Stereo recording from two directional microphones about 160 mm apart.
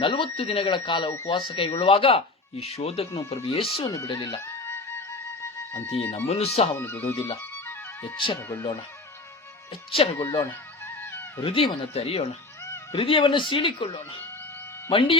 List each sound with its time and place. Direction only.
0.0 s speech: 30° left (ahead or behind)
3.9 s speech: 25° left (ahead or behind)
4.4 s music: 15° left (ahead or behind)
5.9 s speech: 35° left (ahead or behind)
6.7 s speech: 15° left (ahead or behind)
7.5 s music: 15° left (ahead or behind)
8.4 s speech: 20° left (ahead or behind)
9.9 s speech: 35° left (ahead or behind)
10.8 s music: 15° left (ahead or behind)
11.4 s speech: 35° left (ahead or behind)